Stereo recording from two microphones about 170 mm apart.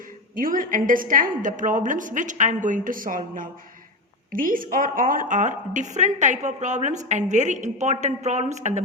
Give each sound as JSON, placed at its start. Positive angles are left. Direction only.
{"t": 0.3, "sound": "a woman's voice", "side_deg": -55}